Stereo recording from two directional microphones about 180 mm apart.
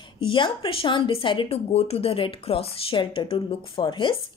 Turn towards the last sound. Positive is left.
turn(degrees=25)  # may be behind; listen again after turning